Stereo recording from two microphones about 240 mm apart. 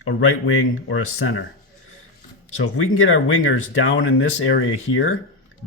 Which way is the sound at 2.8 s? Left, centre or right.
Left.